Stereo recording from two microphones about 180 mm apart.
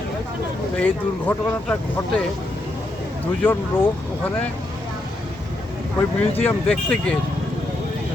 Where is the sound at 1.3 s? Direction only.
10° left (ahead or behind).